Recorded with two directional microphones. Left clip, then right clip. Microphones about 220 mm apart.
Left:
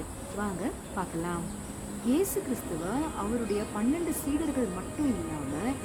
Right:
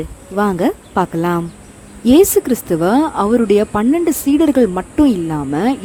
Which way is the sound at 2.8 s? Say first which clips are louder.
Right 19 dB; 45° right (ahead or behind).